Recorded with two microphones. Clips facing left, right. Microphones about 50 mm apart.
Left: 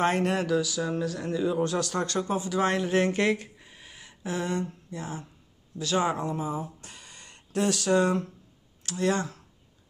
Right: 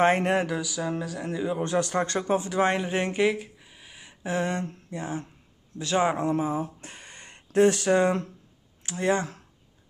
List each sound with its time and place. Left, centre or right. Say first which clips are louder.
0.0 s speech: right 3 dB; right
2.7 s speech: left 2 dB; centre
3.3 s a sound: right 1 dB; centre
4.0 s speech: right 4 dB; right